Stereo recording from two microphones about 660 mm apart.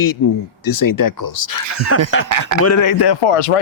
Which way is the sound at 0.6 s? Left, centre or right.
Left.